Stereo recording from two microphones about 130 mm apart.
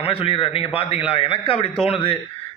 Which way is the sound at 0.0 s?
45° left (ahead or behind).